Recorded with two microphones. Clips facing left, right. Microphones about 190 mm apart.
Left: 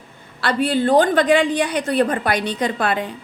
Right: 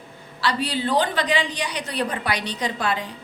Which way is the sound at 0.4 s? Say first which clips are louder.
Left 6 dB; 50° left (ahead or behind).